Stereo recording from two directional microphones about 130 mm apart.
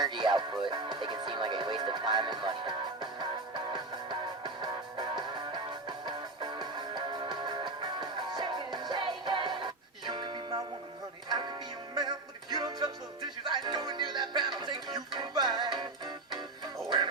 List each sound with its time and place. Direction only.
0.0 s music: 35° right (ahead or behind)